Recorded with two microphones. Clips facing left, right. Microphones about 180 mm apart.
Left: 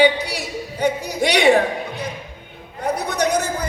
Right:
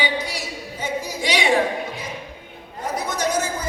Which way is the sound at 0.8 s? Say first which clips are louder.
Left 6 dB; 65° left (ahead or behind).